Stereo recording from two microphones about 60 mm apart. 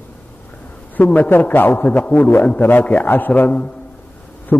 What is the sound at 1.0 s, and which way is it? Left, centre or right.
A man's voice, left.